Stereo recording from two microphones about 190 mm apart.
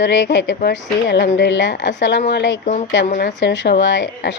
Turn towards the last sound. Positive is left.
turn(degrees=70)  # may be behind; listen again after turning